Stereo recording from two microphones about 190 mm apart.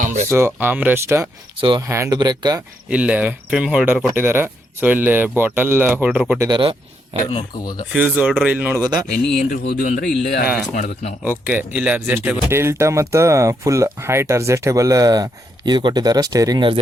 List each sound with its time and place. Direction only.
0.0 s speech: 40° right (ahead or behind)
0.3 s speech: 15° right (ahead or behind)
2.9 s speech: 5° right (ahead or behind)
6.5 s speech: 30° right (ahead or behind)
7.3 s speech: 25° left (ahead or behind)
7.9 s speech: 10° right (ahead or behind)
9.3 s a man's voice: 50° left (ahead or behind)
11.2 s speech: 10° right (ahead or behind); by 16.8 s 25° right (ahead or behind)